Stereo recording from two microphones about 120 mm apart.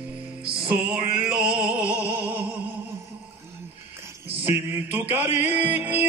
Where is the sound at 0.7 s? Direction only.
10° right (ahead or behind).